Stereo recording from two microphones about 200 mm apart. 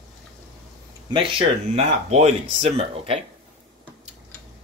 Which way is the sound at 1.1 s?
25° right (ahead or behind).